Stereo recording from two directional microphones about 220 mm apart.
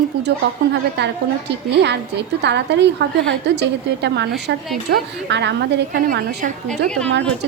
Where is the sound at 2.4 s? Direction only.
50° right (ahead or behind).